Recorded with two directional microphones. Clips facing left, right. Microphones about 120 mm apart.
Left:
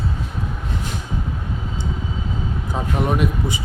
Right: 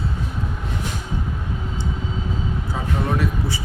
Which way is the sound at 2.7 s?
20° left (ahead or behind).